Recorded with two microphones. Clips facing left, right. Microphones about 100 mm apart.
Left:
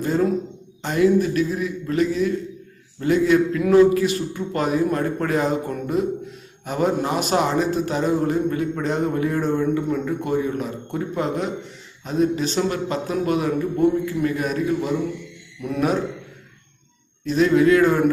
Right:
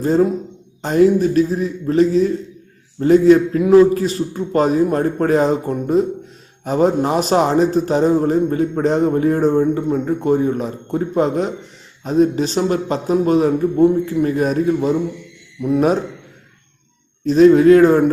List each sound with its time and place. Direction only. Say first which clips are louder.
0.0 s a man's voice: right 5 dB; 35° right (ahead or behind)
15.6 s a man's voice: right 7 dB; 20° right (ahead or behind)
17.2 s a man's voice: right 7 dB; 40° right (ahead or behind)